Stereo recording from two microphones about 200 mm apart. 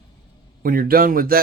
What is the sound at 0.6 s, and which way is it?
Speech, 45° right (ahead or behind).